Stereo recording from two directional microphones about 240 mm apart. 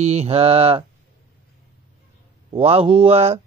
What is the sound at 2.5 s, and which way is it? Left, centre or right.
Mantra, right.